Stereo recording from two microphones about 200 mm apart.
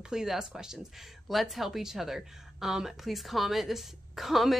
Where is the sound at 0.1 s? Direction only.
5° right (ahead or behind).